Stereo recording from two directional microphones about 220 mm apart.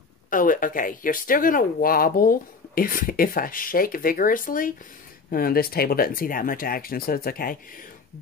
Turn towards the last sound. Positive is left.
turn(degrees=40)  # may be behind; listen again after turning